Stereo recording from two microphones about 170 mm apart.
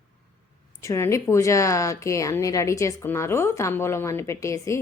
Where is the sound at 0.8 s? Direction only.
15° left (ahead or behind).